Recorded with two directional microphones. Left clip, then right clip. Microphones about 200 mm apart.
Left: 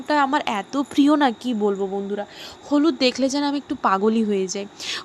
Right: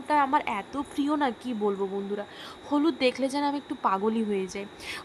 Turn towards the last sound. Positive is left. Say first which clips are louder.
# left 8 dB
turn(degrees=20)  # may be behind; listen again after turning